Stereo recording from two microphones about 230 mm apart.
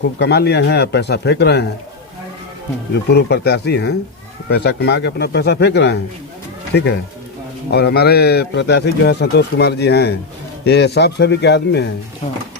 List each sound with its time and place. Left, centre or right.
0.2 s a man's voice: left
2.9 s a man's voice: left